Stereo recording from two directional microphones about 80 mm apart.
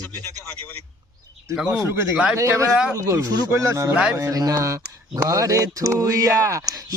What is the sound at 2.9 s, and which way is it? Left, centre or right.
Speech, right.